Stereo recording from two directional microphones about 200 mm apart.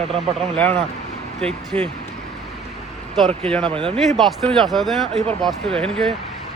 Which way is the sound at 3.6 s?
25° right (ahead or behind).